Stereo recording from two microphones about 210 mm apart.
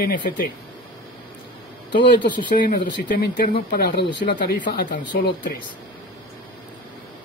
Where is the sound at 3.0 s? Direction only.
45° left (ahead or behind).